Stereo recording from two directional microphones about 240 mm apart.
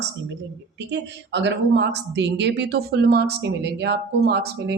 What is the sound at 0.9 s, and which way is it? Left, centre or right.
A woman's voice, right.